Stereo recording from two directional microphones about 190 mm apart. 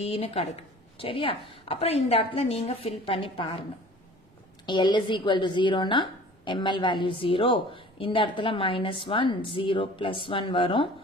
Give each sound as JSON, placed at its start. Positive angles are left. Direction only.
{"t": 0.0, "sound": "a woman's voice", "side_deg": 30}
{"t": 4.6, "sound": "speech", "side_deg": 25}